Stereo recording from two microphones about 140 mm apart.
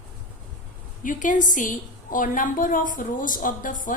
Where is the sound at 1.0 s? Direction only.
65° left (ahead or behind).